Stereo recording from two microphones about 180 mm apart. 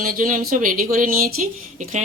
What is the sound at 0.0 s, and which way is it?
Speech, 50° right (ahead or behind).